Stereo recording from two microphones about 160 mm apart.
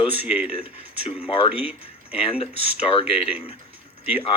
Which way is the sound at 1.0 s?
35° left (ahead or behind).